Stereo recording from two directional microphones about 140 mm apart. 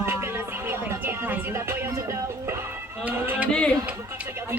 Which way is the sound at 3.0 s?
15° right (ahead or behind).